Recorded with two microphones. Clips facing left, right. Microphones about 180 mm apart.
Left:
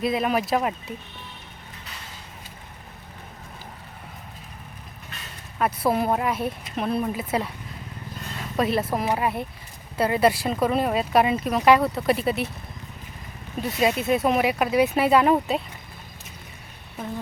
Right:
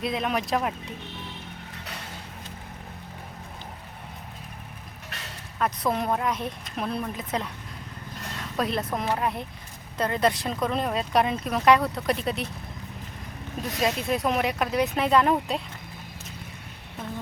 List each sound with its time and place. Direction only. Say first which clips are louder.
0.0 s speech: left 4 dB; 5° left (ahead or behind)
5.1 s a sound: right 1 dB; 75° right (ahead or behind)
5.5 s speech: left 4 dB; 5° left (ahead or behind)
8.4 s a sound: left 4 dB; 5° left (ahead or behind)
8.9 s speech: left 3 dB; 5° left (ahead or behind)
13.6 s speech: left 4 dB; 5° left (ahead or behind)